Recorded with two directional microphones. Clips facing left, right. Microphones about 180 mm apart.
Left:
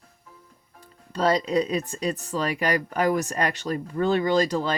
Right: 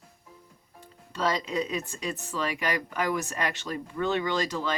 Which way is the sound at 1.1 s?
35° left (ahead or behind).